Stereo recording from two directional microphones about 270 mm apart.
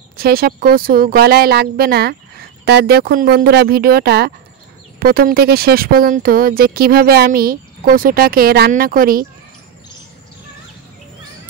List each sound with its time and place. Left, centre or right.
0.2 s speech: right